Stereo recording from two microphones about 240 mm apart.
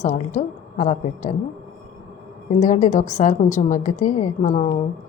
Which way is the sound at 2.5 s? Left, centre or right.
Left.